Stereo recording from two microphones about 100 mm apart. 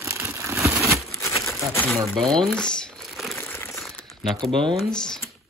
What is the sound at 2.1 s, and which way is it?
Speech, 5° left (ahead or behind).